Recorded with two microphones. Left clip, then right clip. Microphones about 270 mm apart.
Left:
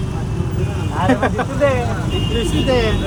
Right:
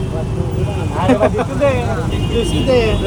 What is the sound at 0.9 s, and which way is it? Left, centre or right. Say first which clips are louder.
Vehicle: right 3 dB; right.